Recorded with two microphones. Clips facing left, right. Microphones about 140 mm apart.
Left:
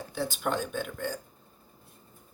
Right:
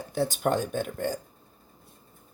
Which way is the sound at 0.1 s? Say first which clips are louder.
Right 5 dB; 45° right (ahead or behind).